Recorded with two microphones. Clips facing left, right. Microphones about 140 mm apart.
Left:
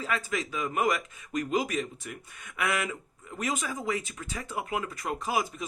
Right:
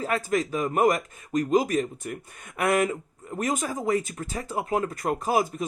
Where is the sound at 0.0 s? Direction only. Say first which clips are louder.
Right 6 dB; 45° right (ahead or behind).